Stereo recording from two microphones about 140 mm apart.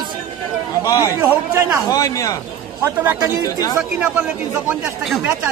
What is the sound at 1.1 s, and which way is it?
Speech, 20° right (ahead or behind).